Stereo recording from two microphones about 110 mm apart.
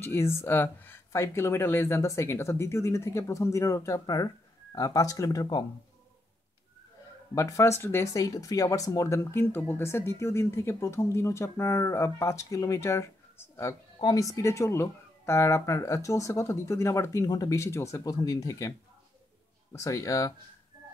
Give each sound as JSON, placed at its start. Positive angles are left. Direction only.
{"t": 0.0, "sound": "speech", "side_deg": 25}
{"t": 7.3, "sound": "speech", "side_deg": 25}
{"t": 19.7, "sound": "speech", "side_deg": 30}